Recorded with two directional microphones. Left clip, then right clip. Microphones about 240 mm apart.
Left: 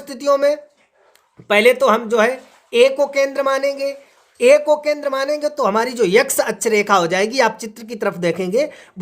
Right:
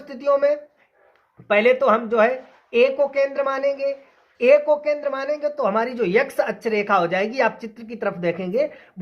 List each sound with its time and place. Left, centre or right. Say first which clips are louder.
0.1 s speech: left 3 dB; left